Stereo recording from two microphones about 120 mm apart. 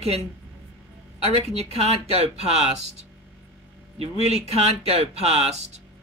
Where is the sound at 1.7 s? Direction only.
60° right (ahead or behind).